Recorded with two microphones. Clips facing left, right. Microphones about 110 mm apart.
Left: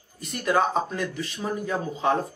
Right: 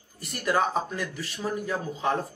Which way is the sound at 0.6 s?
5° right (ahead or behind).